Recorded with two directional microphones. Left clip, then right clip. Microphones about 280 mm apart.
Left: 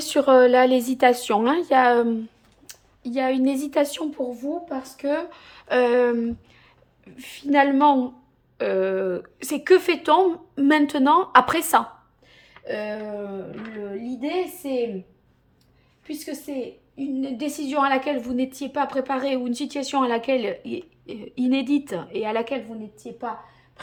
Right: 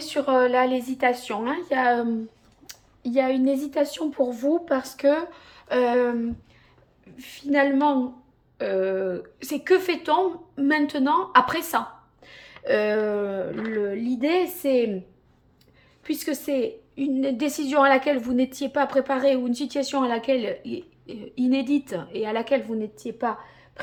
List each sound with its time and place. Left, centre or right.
0.0 s a woman's voice: left
2.6 s a woman's voice: centre
4.2 s a woman's voice: centre
12.2 s a sound: centre
12.6 s a woman's voice: centre
16.0 s a woman's voice: centre